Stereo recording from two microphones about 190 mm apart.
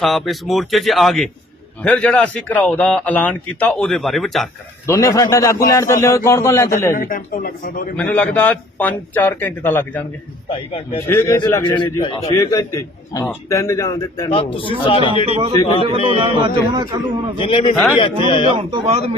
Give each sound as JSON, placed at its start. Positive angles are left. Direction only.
{"t": 0.0, "sound": "a man's voice", "side_deg": 0}
{"t": 4.9, "sound": "a man's voice", "side_deg": 15}
{"t": 6.9, "sound": "speech", "side_deg": 45}
{"t": 7.9, "sound": "a man's voice", "side_deg": 5}
{"t": 10.5, "sound": "a man's voice", "side_deg": 30}
{"t": 11.1, "sound": "a man's voice", "side_deg": 15}
{"t": 12.3, "sound": "a man's voice", "side_deg": 15}
{"t": 14.3, "sound": "a man's voice", "side_deg": 30}
{"t": 15.3, "sound": "speech", "side_deg": -30}
{"t": 15.6, "sound": "a man's voice", "side_deg": 25}
{"t": 16.0, "sound": "a man's voice", "side_deg": -30}
{"t": 17.3, "sound": "a man's voice", "side_deg": 30}
{"t": 18.7, "sound": "speech", "side_deg": -30}